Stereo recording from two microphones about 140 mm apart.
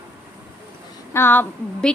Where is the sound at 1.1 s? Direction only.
15° left (ahead or behind).